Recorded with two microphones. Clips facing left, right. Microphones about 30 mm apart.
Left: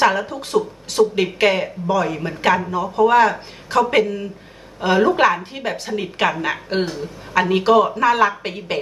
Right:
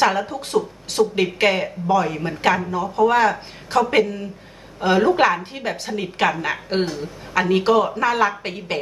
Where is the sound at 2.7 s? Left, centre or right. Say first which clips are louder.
Left 2 dB; centre.